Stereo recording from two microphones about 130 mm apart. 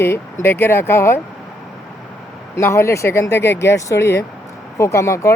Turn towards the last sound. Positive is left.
turn(degrees=25)  # may be behind; listen again after turning